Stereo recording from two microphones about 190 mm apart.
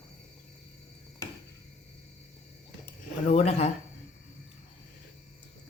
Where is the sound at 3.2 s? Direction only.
35° left (ahead or behind).